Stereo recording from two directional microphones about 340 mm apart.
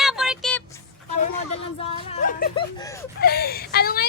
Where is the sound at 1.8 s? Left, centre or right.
Left.